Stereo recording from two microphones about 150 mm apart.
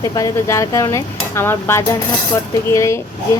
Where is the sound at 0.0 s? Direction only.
20° left (ahead or behind).